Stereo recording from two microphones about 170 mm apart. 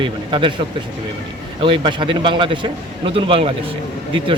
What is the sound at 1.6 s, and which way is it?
A man's voice, 30° right (ahead or behind).